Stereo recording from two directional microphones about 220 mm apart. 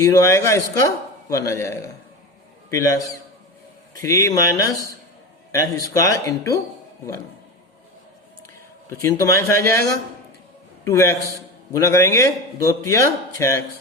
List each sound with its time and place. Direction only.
0.0 s a man's voice: 15° left (ahead or behind)
4.0 s a man's voice: 15° left (ahead or behind)
8.9 s a man's voice: 15° left (ahead or behind)